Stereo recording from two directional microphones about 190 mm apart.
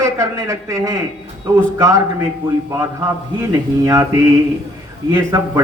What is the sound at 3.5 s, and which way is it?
Speech, 15° right (ahead or behind).